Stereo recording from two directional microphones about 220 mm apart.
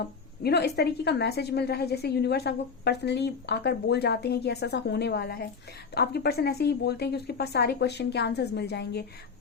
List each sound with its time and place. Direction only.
0.0 s a woman's voice: 45° left (ahead or behind)